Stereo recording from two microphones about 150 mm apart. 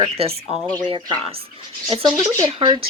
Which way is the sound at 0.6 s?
10° left (ahead or behind).